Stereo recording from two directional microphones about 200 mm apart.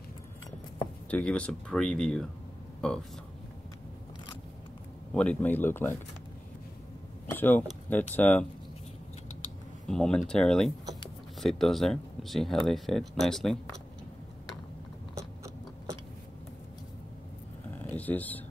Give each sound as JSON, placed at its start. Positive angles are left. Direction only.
{"t": 1.1, "sound": "speech", "side_deg": 5}
{"t": 5.1, "sound": "speech", "side_deg": 5}
{"t": 7.2, "sound": "speech", "side_deg": 10}
{"t": 9.8, "sound": "speech", "side_deg": 5}
{"t": 17.8, "sound": "a sound", "side_deg": 5}